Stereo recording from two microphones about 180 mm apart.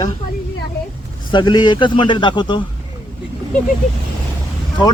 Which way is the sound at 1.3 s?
25° left (ahead or behind).